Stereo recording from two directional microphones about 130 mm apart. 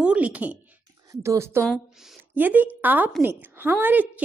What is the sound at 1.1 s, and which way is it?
A woman's voice, 25° right (ahead or behind).